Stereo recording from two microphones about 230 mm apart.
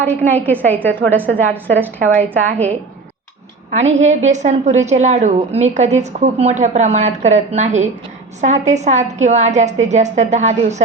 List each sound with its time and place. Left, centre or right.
0.0 s a woman's voice: centre
4.0 s a woman's voice: right